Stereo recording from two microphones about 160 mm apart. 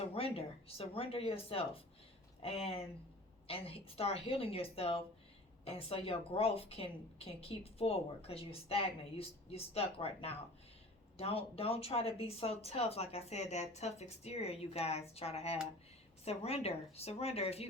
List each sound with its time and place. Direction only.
0.0 s a woman's voice: 40° left (ahead or behind)